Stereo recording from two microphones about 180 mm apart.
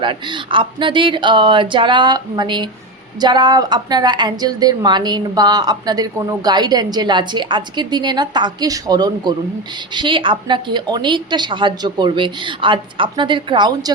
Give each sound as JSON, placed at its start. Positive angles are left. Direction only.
{"t": 0.0, "sound": "a woman's voice", "side_deg": -25}